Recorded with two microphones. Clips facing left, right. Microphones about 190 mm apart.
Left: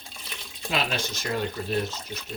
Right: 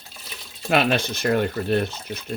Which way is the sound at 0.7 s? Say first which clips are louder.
Right 8 dB; 65° right (ahead or behind).